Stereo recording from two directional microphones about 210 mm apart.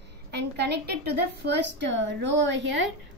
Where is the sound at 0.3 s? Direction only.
55° right (ahead or behind).